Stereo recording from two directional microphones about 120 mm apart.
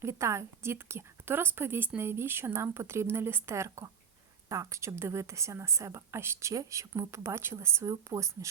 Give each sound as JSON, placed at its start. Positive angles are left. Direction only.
{"t": 0.0, "sound": "a woman's voice", "side_deg": -25}